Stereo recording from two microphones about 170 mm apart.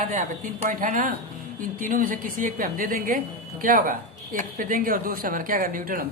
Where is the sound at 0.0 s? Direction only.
50° right (ahead or behind).